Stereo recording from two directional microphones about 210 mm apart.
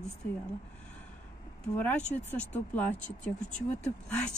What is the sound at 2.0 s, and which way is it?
Speech, 30° left (ahead or behind).